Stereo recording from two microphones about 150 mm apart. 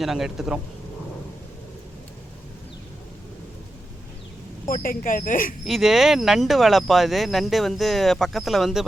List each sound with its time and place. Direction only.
0.0 s speech: centre (ahead or behind)
4.7 s speech: 70° left (ahead or behind)
5.6 s speech: centre (ahead or behind)